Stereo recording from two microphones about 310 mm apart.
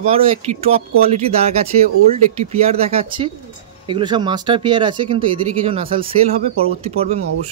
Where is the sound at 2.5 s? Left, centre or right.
Centre.